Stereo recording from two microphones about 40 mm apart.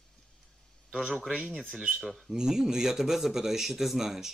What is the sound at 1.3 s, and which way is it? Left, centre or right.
Speech, right.